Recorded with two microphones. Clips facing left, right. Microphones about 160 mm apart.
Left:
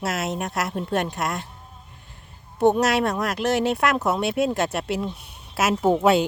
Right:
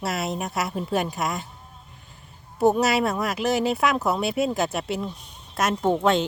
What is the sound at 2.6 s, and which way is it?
Speech, centre (ahead or behind).